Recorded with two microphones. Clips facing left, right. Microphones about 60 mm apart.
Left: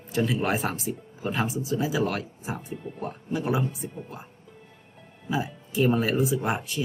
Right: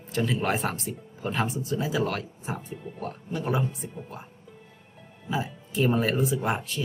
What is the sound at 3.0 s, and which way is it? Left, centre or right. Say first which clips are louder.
Speech: left 2 dB; centre.